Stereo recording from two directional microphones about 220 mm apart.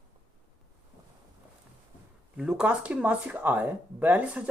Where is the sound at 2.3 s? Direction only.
5° right (ahead or behind).